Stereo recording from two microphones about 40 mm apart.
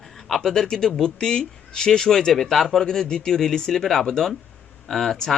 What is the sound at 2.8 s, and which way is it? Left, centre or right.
Speech, centre.